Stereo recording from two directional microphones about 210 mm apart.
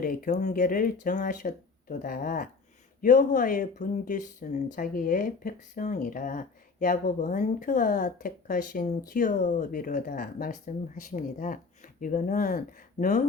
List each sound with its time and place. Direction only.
0.0 s speech: 40° left (ahead or behind)